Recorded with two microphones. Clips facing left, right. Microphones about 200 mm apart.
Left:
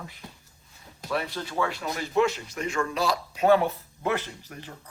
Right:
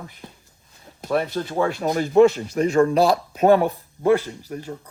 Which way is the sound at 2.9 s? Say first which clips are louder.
Right 9 dB; 50° right (ahead or behind).